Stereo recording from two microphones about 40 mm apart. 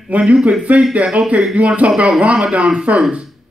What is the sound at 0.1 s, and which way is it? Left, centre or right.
Speech, right.